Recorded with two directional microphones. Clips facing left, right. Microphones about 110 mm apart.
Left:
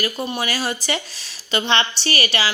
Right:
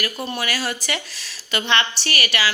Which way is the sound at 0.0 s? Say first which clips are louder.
Left 2 dB; 20° left (ahead or behind).